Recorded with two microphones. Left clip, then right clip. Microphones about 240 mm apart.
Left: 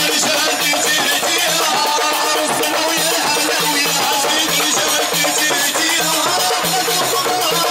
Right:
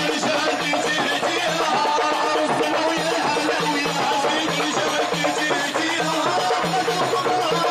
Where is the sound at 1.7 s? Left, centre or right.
Centre.